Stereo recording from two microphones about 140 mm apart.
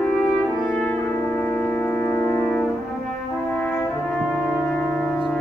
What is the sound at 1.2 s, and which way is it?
Music, 15° left (ahead or behind).